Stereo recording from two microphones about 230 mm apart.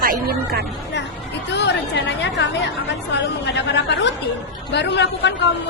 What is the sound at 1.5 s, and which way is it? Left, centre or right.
Speech, left.